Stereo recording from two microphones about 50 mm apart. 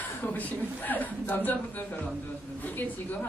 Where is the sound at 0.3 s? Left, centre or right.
Left.